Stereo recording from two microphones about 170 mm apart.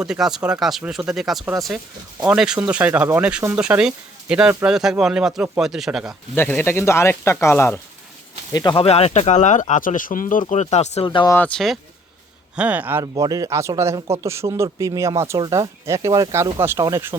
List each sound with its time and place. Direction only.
0.0 s speech: 5° right (ahead or behind)
6.3 s speech: 10° left (ahead or behind)
8.5 s speech: 30° left (ahead or behind); by 10.4 s 50° left (ahead or behind)
10.5 s speech: 40° left (ahead or behind)
11.3 s speech: 10° left (ahead or behind)
12.5 s speech: 10° right (ahead or behind)